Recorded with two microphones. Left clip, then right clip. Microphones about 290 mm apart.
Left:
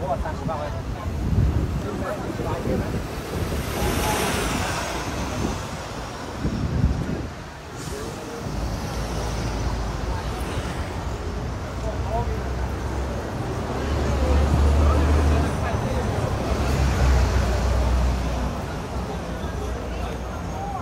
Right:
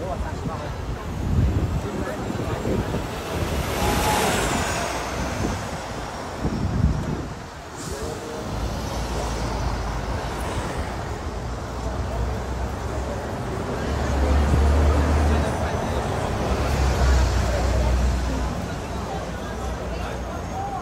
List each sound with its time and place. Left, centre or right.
3.8 s vehicle: right